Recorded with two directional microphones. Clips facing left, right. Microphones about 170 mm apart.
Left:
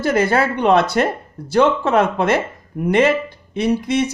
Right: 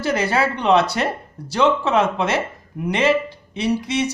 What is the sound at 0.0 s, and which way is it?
Speech, 50° left (ahead or behind).